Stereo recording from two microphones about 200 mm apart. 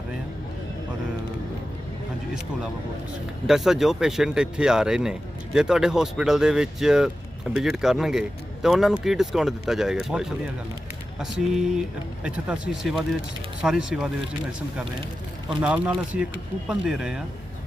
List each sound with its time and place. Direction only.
3.4 s speech: centre (ahead or behind)
15.6 s speech: 5° right (ahead or behind)